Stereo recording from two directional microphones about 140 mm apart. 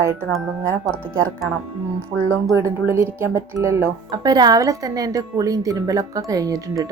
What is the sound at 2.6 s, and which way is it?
Speech, 20° right (ahead or behind).